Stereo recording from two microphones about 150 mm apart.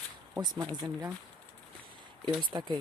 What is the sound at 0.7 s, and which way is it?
Speech, 25° right (ahead or behind).